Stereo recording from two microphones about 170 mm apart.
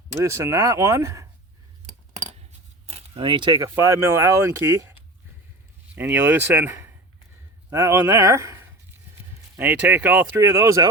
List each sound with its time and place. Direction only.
0.2 s speech: 15° right (ahead or behind)
2.1 s speech: 45° right (ahead or behind); by 10.8 s 15° right (ahead or behind)